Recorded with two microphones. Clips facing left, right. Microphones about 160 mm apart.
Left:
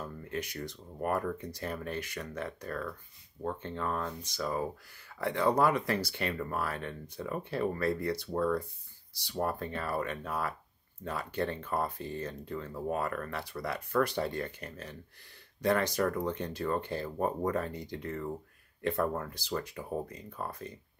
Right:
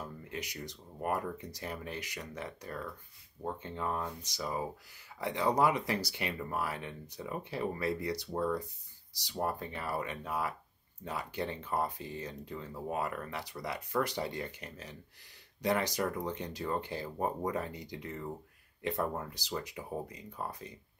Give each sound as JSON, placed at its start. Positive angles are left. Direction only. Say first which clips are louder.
{"t": 0.0, "sound": "speech", "louder": "left 4 dB", "side_deg": -15}